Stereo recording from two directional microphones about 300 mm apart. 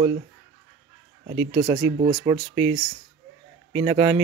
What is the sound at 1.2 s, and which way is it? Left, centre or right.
Speech, centre.